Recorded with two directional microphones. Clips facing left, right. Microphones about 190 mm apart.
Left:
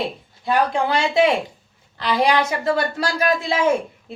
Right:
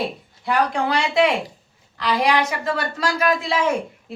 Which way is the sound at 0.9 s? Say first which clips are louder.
Left 2 dB; 30° left (ahead or behind).